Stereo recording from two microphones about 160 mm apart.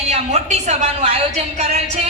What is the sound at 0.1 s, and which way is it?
A woman's voice, 45° right (ahead or behind).